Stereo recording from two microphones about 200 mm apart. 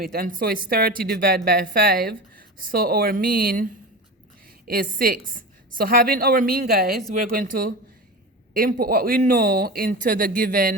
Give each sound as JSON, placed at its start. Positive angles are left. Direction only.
{"t": 0.0, "sound": "a woman's voice", "side_deg": -45}